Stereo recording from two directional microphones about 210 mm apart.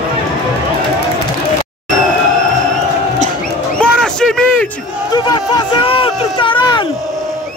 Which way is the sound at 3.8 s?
5° left (ahead or behind).